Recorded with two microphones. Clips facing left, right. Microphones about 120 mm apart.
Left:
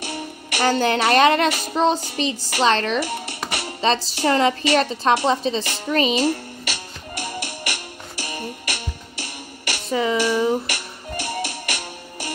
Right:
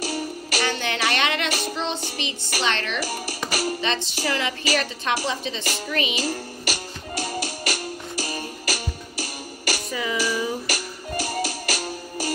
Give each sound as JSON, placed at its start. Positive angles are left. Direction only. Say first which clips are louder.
{"t": 0.0, "sound": "music", "louder": "right 3 dB", "side_deg": 25}
{"t": 0.7, "sound": "a woman's voice", "louder": "left 8 dB", "side_deg": 40}
{"t": 7.2, "sound": "music", "louder": "right 2 dB", "side_deg": -30}
{"t": 8.7, "sound": "music", "louder": "right 2 dB", "side_deg": 25}
{"t": 11.4, "sound": "music", "louder": "right 2 dB", "side_deg": -30}